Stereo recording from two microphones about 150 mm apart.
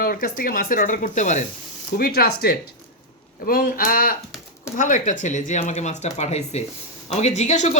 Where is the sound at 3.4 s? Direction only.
75° left (ahead or behind).